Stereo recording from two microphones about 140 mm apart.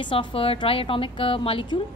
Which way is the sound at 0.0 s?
35° left (ahead or behind).